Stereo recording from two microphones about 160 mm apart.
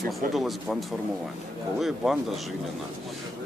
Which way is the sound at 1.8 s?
Centre (ahead or behind).